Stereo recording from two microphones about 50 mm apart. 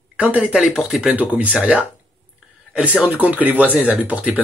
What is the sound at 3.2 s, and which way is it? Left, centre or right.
Speech, right.